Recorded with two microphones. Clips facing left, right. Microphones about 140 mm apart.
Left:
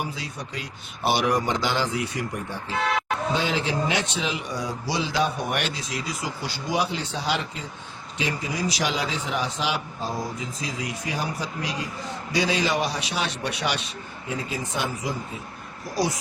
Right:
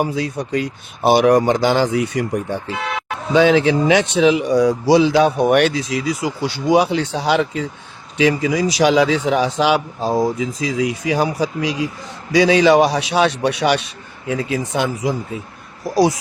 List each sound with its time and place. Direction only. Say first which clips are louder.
0.0 s speech: right 12 dB; 50° right (ahead or behind)
2.7 s a sound: even; 5° right (ahead or behind)
3.3 s speech: right 15 dB; 75° right (ahead or behind)
8.2 s speech: right 12 dB; 90° right